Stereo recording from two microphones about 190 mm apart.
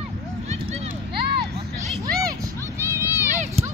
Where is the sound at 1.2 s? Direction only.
55° right (ahead or behind).